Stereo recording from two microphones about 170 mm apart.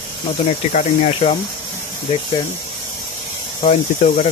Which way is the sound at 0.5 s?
40° left (ahead or behind).